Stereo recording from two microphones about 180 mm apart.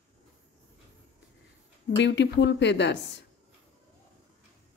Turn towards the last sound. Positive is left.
turn(degrees=75)  # may be behind; listen again after turning